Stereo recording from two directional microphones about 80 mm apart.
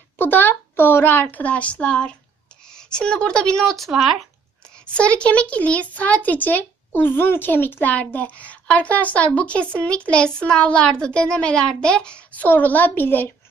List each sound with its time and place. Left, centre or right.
0.2 s a child's voice: left; by 4.3 s centre
4.8 s a child's voice: centre